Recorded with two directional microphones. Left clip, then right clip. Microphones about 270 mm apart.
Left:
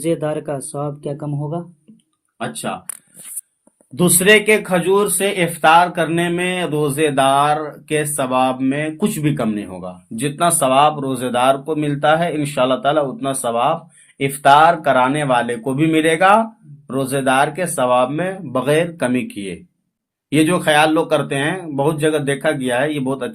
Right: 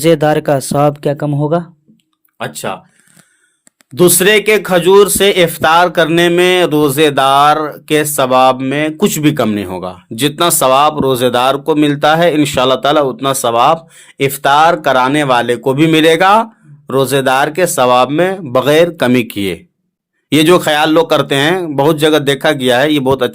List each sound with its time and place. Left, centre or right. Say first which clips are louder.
0.0 s speech: right 10 dB; right
3.9 s speech: right 4 dB; right